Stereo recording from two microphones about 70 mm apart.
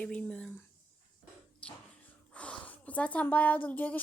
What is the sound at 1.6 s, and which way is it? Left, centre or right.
A woman's voice, centre.